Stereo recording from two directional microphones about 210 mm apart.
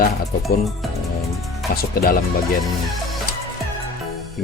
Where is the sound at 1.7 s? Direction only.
45° left (ahead or behind).